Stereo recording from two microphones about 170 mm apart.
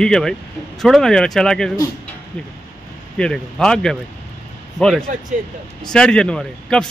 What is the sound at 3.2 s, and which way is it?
Speech, 5° left (ahead or behind).